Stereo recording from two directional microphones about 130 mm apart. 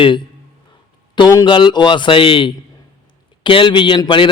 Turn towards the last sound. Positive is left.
turn(degrees=40)  # may be behind; listen again after turning